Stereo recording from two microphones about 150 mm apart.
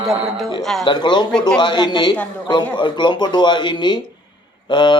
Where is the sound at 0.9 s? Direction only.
30° left (ahead or behind).